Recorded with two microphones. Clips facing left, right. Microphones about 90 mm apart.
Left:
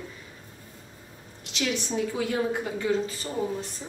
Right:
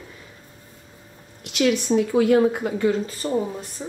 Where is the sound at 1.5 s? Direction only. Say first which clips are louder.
Right 9 dB; 60° right (ahead or behind).